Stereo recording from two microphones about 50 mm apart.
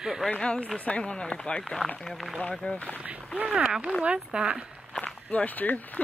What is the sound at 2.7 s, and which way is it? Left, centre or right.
Speech, left.